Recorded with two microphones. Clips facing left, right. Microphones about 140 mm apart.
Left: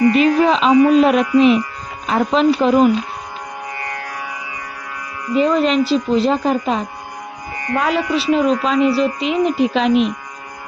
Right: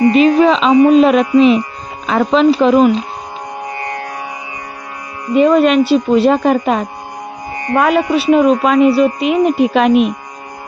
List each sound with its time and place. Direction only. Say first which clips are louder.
0.0 s a woman's voice: right 4 dB; 25° right (ahead or behind)
0.7 s music: right 2 dB; 25° right (ahead or behind)
2.1 s speech: right 4 dB; 90° right
3.7 s music: right 5 dB; 25° right (ahead or behind)
5.3 s speech: right 5 dB; 60° right (ahead or behind)
7.5 s music: right 4 dB; 25° right (ahead or behind)
7.8 s speech: right 6 dB; 55° right (ahead or behind)